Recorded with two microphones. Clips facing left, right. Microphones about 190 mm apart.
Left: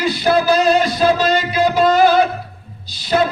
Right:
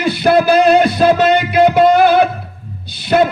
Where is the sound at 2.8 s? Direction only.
60° right (ahead or behind).